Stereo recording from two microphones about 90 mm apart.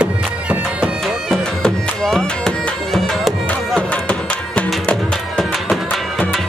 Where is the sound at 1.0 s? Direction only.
5° left (ahead or behind).